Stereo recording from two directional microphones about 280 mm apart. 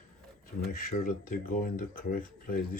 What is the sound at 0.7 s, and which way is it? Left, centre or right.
Speech, left.